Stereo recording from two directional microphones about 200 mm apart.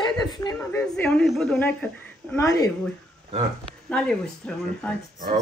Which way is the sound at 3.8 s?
5° left (ahead or behind).